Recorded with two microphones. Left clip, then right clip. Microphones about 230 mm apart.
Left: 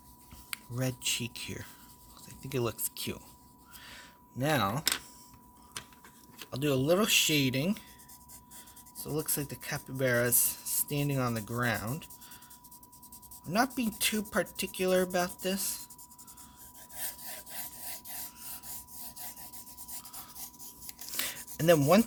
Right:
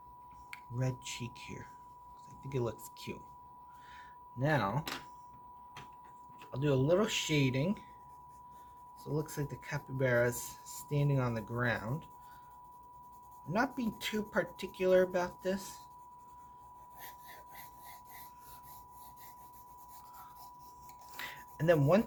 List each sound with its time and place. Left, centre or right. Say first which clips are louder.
0.5 s speech: left 5 dB; left
3.8 s a sound: even; left
6.5 s speech: left 2 dB; left
9.0 s speech: left 3 dB; left
13.5 s speech: left 4 dB; left
21.1 s a sound: left 7 dB; left